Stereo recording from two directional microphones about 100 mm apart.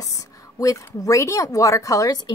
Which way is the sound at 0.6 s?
35° left (ahead or behind).